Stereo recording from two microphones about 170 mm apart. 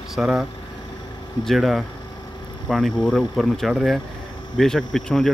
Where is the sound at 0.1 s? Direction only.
Centre (ahead or behind).